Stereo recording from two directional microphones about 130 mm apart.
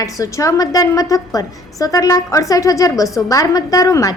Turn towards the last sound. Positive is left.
turn(degrees=25)  # may be behind; listen again after turning